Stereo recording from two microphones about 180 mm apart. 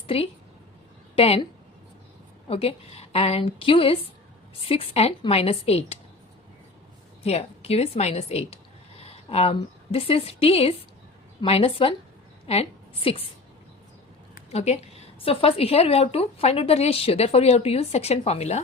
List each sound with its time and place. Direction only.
1.1 s a woman's voice: 30° left (ahead or behind)
2.5 s a woman's voice: 35° left (ahead or behind)
7.2 s a woman's voice: 35° left (ahead or behind)
14.3 s a woman's voice: 40° left (ahead or behind)